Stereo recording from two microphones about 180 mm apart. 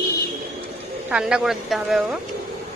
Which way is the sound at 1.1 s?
5° right (ahead or behind).